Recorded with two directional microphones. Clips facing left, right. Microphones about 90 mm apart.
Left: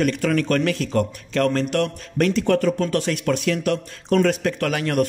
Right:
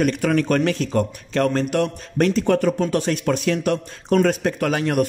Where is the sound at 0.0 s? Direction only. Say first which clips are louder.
Right 1 dB; 20° right (ahead or behind).